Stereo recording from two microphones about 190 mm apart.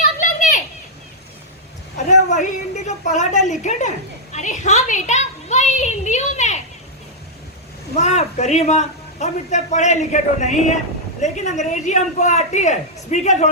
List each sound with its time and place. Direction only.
0.2 s children playing: 40° left (ahead or behind)
2.0 s a sound: 40° left (ahead or behind)
7.9 s a woman's voice: 35° left (ahead or behind)